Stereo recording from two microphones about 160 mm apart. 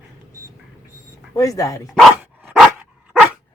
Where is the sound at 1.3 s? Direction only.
20° left (ahead or behind).